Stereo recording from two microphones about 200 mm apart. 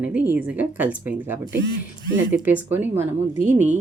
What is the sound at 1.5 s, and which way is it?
Mechanisms, 60° right (ahead or behind).